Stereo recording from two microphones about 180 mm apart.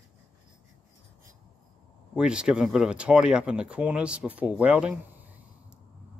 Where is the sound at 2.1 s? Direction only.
5° right (ahead or behind).